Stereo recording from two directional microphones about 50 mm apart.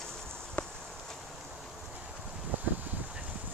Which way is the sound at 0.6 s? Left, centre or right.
Left.